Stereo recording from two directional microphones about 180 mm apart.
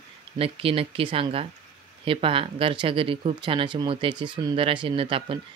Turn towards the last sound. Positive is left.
turn(degrees=-30)  # may be behind; listen again after turning